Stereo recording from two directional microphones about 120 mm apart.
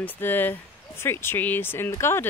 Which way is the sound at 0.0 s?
15° left (ahead or behind).